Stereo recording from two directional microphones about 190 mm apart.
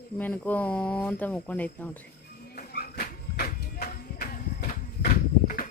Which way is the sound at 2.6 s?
55° left (ahead or behind).